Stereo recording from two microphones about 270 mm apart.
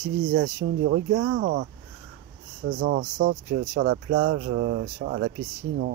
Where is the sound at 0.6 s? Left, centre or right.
Right.